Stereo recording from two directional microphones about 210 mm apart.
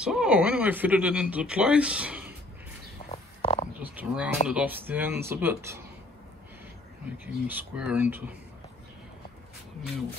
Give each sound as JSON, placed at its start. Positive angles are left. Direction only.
{"t": 0.0, "sound": "speech", "side_deg": -5}
{"t": 3.1, "sound": "stomach rumble", "side_deg": 30}
{"t": 3.8, "sound": "speech", "side_deg": -5}
{"t": 7.4, "sound": "speech", "side_deg": -5}